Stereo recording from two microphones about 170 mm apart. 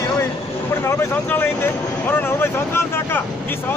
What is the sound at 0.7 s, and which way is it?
Speech, 15° left (ahead or behind).